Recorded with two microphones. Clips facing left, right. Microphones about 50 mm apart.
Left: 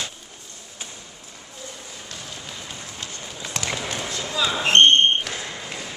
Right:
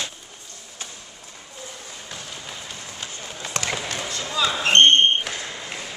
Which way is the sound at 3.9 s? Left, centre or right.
Centre.